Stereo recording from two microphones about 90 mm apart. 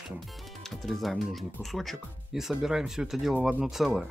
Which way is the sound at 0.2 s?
Centre (ahead or behind).